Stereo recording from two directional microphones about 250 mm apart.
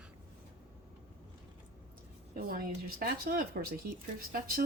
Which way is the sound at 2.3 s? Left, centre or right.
Right.